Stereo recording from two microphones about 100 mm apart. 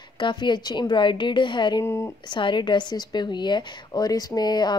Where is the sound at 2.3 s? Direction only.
50° left (ahead or behind).